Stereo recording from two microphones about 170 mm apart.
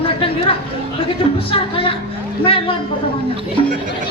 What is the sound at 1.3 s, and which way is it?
Speech, 30° left (ahead or behind).